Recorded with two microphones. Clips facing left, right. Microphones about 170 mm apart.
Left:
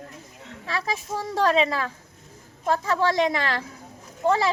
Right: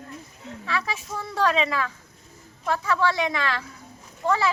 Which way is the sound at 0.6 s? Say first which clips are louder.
Left 1 dB; 35° left (ahead or behind).